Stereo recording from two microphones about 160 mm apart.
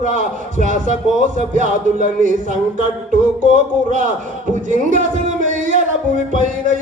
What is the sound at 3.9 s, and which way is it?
Speech, 50° right (ahead or behind).